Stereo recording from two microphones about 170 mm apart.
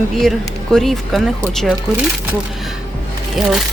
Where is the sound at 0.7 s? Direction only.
Centre (ahead or behind).